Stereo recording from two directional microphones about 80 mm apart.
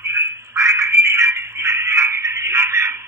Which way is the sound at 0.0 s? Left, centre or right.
Right.